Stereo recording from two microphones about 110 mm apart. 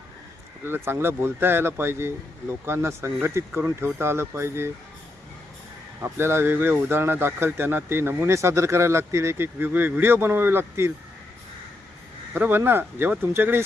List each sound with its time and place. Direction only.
0.6 s speech: 20° right (ahead or behind)
6.0 s speech: 20° right (ahead or behind)
12.3 s speech: 20° right (ahead or behind)